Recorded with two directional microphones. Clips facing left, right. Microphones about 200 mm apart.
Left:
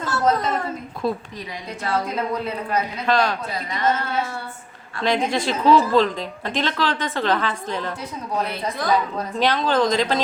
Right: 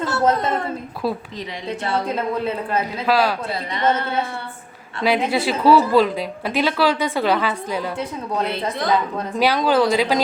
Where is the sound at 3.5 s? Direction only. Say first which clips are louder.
Right 2 dB; 30° right (ahead or behind).